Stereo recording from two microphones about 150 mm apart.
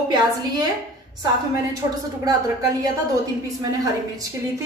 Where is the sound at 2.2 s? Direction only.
25° right (ahead or behind).